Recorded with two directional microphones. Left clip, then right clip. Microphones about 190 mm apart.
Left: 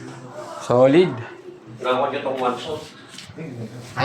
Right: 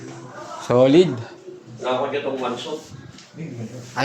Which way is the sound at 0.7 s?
20° right (ahead or behind).